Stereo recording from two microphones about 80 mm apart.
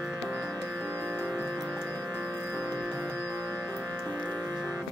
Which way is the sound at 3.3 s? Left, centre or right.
Right.